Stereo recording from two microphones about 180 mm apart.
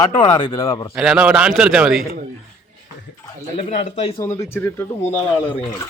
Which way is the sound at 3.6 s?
40° left (ahead or behind).